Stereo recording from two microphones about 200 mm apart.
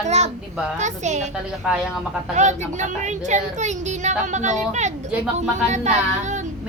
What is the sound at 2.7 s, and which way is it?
Speech, 35° right (ahead or behind).